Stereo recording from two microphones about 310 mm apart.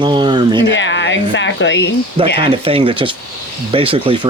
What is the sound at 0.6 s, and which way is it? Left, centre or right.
Speech, left.